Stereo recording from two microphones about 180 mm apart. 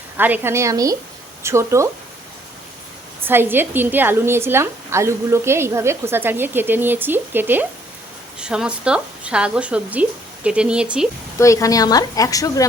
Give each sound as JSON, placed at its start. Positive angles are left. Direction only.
{"t": 0.2, "sound": "a woman's voice", "side_deg": -10}
{"t": 3.2, "sound": "a woman's voice", "side_deg": -10}
{"t": 11.3, "sound": "speech", "side_deg": 15}